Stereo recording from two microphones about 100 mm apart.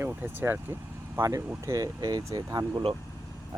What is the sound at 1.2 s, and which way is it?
Speech, 30° right (ahead or behind).